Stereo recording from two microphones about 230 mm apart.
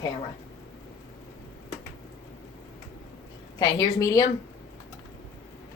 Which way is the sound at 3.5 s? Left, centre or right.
Centre.